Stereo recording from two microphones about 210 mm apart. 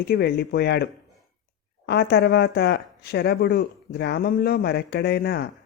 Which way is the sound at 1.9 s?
50° left (ahead or behind).